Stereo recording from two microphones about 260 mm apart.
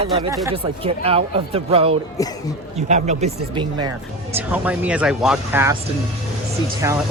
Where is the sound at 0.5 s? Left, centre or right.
Right.